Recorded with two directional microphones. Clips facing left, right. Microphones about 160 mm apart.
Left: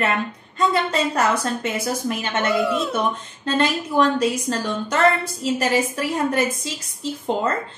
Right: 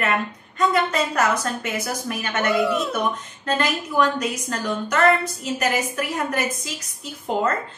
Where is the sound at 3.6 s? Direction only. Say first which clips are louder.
Left 3 dB; 30° left (ahead or behind).